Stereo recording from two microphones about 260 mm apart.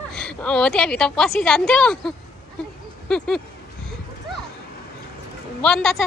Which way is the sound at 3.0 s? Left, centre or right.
Centre.